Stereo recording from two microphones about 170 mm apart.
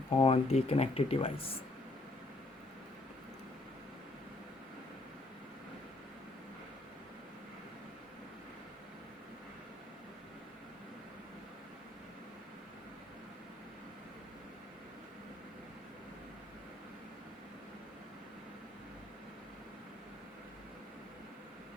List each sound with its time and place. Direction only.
0.2 s speech: 35° left (ahead or behind)